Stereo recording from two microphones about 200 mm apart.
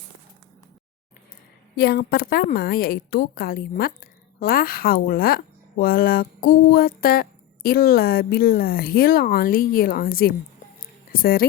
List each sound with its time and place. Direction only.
1.7 s a woman's voice: 50° left (ahead or behind)